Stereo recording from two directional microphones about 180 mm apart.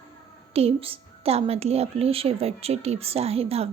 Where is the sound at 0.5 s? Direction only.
30° right (ahead or behind).